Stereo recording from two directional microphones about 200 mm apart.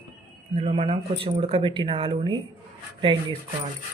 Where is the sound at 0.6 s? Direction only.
30° right (ahead or behind).